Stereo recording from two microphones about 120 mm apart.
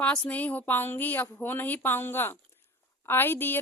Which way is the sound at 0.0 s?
10° left (ahead or behind).